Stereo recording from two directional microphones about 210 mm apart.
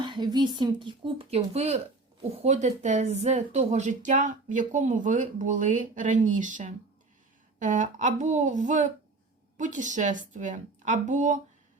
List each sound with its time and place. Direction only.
0.0 s speech: 20° right (ahead or behind)